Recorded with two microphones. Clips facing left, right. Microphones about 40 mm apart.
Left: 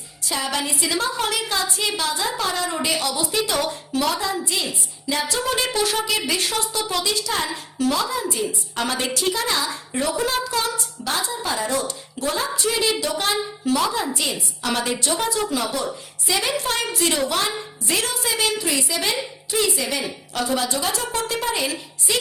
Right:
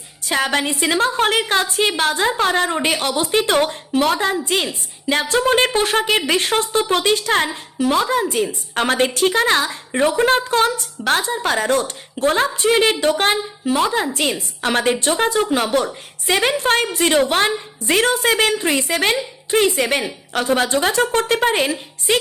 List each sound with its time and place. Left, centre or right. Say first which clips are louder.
0.3 s a woman's voice: right 6 dB; right
14.2 s a woman's voice: right 5 dB; right